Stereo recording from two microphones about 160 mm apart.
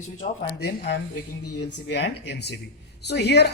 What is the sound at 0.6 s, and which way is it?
Speech, 85° left.